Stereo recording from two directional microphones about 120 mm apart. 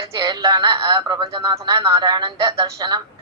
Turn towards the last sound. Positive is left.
turn(degrees=-35)  # may be behind; listen again after turning